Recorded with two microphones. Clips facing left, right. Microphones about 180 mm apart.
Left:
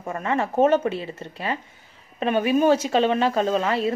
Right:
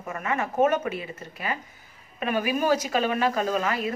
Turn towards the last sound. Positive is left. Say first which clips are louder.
# left 4 dB
turn(degrees=30)  # may be behind; listen again after turning